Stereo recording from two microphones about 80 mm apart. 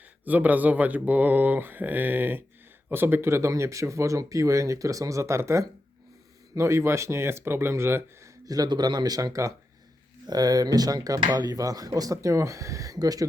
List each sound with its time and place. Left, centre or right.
0.0 s speech: right
8.4 s speech: right
10.2 s speech: right